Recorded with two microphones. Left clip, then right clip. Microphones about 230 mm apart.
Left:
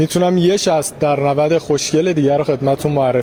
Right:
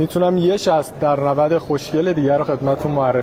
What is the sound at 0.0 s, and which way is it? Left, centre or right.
A man's voice, left.